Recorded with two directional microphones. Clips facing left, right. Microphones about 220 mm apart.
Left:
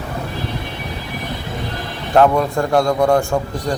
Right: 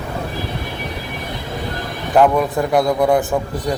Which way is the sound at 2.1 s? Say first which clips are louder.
Even; 5° right (ahead or behind).